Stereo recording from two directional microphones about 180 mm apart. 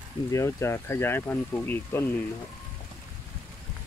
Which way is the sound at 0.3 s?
15° left (ahead or behind).